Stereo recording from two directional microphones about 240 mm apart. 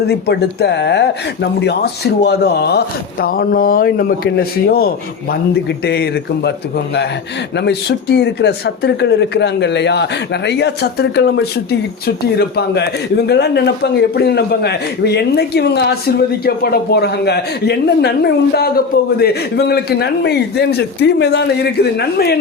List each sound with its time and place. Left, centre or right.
0.0 s speech: left
7.5 s speech: left